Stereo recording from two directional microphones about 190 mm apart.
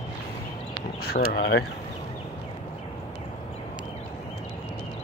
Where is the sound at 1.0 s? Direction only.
55° left (ahead or behind).